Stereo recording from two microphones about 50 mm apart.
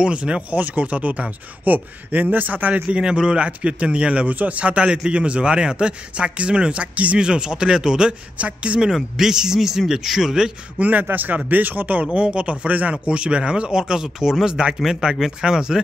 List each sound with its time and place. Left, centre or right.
0.0 s speech: right
0.6 s speech: right
3.0 s speech: centre
10.8 s speech: right
12.3 s speech: right